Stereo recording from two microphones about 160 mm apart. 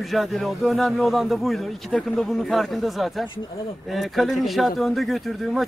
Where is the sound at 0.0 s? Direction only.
Centre (ahead or behind).